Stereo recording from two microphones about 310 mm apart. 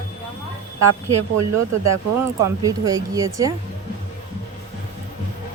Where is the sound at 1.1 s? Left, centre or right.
Right.